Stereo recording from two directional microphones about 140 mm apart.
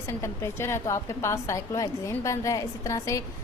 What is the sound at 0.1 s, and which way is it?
A woman's voice, 20° left (ahead or behind).